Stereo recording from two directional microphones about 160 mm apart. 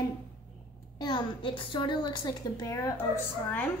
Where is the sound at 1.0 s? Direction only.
30° left (ahead or behind).